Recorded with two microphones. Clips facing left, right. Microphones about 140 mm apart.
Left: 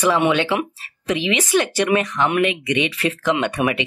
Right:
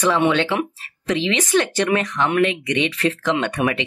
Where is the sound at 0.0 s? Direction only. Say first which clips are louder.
Even; 15° left (ahead or behind).